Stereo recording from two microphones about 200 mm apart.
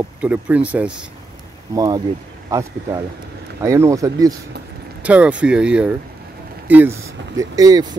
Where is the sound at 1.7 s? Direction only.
20° right (ahead or behind).